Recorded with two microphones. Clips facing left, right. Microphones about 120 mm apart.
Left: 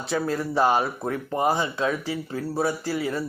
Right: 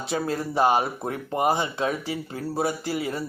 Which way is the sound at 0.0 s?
20° right (ahead or behind).